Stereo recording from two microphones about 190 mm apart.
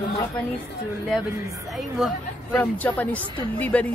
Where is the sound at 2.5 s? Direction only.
10° left (ahead or behind).